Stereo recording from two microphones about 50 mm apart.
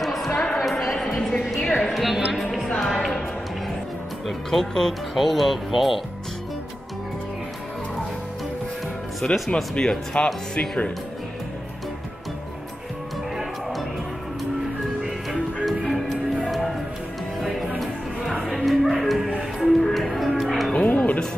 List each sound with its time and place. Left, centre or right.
0.0 s a sound: centre
0.3 s a sound: centre
0.6 s a sound: centre
0.9 s music: centre
1.6 s a sound: centre
2.0 s speech: centre
2.8 s music: centre
4.3 s speech: centre
9.2 s speech: centre
13.4 s music: centre
15.0 s music: centre
20.7 s music: left